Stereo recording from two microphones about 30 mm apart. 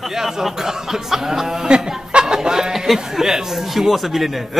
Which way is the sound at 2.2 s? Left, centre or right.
Right.